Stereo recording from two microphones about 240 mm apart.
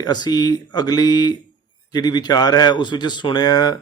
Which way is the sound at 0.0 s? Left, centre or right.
Centre.